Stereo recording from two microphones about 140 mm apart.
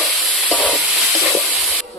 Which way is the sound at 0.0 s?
Centre (ahead or behind).